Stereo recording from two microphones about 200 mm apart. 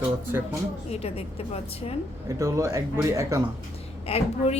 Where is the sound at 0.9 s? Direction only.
30° left (ahead or behind).